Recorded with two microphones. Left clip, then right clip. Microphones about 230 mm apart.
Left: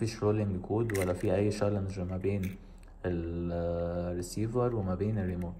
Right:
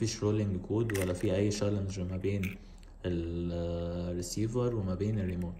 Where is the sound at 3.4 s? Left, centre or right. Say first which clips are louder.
Left 3 dB; centre.